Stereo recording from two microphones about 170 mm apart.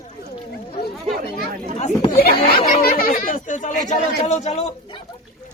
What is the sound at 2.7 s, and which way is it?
Speech, 60° left (ahead or behind).